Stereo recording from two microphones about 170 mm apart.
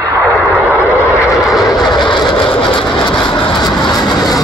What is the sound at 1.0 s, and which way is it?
Vehicle, 15° left (ahead or behind).